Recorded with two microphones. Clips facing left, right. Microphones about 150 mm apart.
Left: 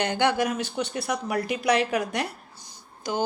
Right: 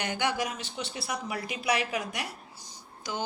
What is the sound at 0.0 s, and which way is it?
Speech, 65° left (ahead or behind).